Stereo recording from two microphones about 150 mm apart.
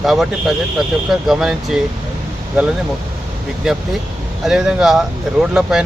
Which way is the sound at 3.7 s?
5° right (ahead or behind).